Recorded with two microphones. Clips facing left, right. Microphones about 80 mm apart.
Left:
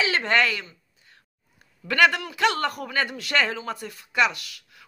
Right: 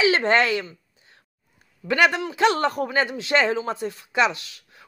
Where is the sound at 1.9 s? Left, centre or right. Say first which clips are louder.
Right 1 dB; right.